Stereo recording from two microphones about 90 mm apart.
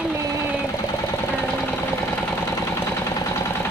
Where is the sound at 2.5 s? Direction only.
30° left (ahead or behind).